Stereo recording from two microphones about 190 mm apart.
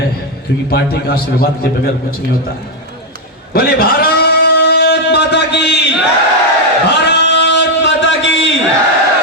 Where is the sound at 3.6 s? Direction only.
50° left (ahead or behind).